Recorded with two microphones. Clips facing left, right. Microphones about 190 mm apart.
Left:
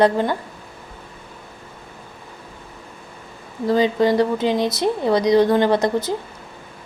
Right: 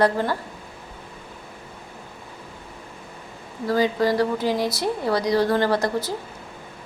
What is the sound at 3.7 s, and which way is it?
A woman's voice, 20° left (ahead or behind).